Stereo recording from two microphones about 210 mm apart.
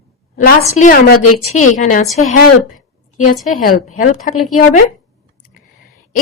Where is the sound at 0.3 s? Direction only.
45° left (ahead or behind).